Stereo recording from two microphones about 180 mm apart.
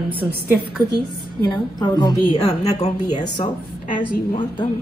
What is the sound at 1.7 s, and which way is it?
Speech, 20° left (ahead or behind).